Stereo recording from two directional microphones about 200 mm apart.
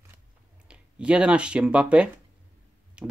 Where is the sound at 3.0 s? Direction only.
5° right (ahead or behind).